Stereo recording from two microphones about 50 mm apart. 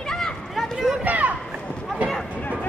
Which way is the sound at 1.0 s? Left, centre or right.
Right.